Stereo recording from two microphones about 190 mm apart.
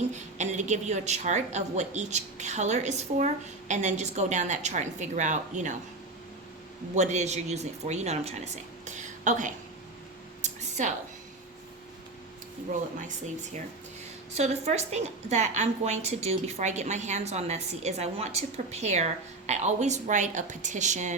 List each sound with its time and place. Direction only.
0.1 s a woman's voice: 40° right (ahead or behind)
6.9 s a woman's voice: 35° right (ahead or behind)
8.9 s a sound: 40° right (ahead or behind)
14.3 s a woman's voice: 35° right (ahead or behind)